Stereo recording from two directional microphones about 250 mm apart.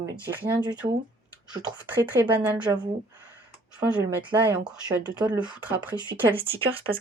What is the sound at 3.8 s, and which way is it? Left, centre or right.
Speech, centre.